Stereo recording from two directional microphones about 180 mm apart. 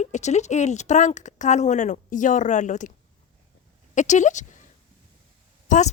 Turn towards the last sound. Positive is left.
turn(degrees=40)  # may be behind; listen again after turning